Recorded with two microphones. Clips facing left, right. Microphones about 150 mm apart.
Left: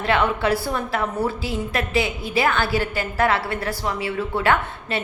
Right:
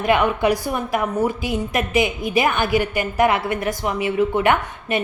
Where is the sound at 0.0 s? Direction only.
15° right (ahead or behind).